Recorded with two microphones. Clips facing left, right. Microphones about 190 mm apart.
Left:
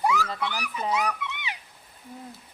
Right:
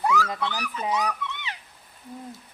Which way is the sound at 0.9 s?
10° left (ahead or behind).